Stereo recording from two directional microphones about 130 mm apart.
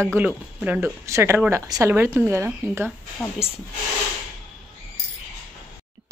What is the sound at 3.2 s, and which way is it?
Speech, 5° left (ahead or behind).